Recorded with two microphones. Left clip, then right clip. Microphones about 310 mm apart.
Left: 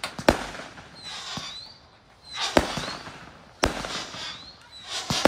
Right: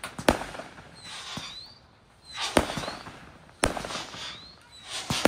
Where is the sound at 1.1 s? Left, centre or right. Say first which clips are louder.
Left 3 dB; centre.